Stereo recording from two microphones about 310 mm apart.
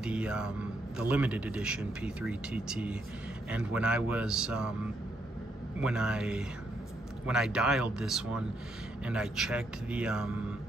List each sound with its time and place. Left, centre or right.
0.0 s a man's voice: centre
5.8 s a man's voice: centre